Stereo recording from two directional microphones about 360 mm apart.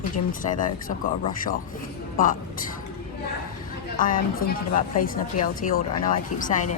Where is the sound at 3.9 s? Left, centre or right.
Left.